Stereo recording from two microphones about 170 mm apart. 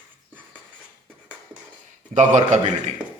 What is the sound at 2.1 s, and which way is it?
Speech, 45° right (ahead or behind).